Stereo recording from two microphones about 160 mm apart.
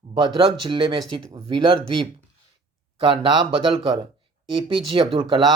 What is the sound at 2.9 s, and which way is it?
Speech, 30° right (ahead or behind).